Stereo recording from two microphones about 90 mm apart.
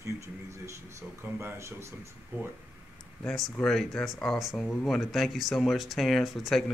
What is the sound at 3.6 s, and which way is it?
Speech, 5° left (ahead or behind).